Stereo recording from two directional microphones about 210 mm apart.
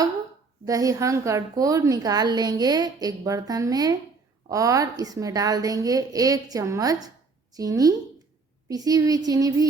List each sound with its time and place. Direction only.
0.6 s a woman's voice: 15° right (ahead or behind)